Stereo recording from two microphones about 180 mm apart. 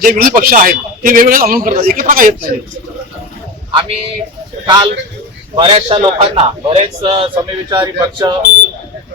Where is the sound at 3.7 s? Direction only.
25° right (ahead or behind).